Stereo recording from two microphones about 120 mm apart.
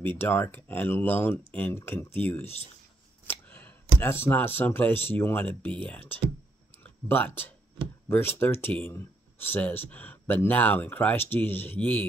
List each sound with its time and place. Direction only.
0.0 s speech: 20° left (ahead or behind)
6.8 s a sound: 15° left (ahead or behind)
8.1 s speech: 20° left (ahead or behind)